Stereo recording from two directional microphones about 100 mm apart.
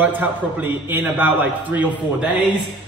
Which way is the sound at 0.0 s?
20° right (ahead or behind).